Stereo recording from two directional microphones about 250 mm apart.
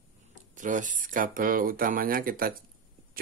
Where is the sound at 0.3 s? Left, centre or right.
Right.